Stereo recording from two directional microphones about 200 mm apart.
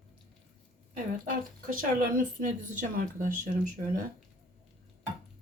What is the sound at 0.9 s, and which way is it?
Speech, 45° right (ahead or behind).